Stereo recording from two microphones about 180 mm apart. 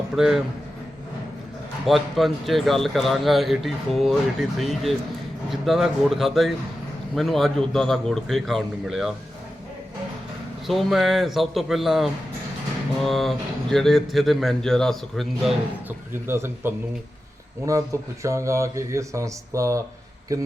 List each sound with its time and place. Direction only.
0.2 s speech: 5° right (ahead or behind)
1.8 s speech: centre (ahead or behind)
10.7 s speech: centre (ahead or behind)
15.9 s speech: 15° right (ahead or behind)